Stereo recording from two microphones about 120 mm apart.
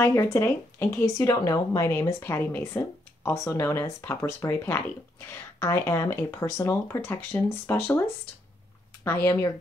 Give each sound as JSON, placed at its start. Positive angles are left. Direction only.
{"t": 0.0, "sound": "speech", "side_deg": 25}
{"t": 9.0, "sound": "speech", "side_deg": 25}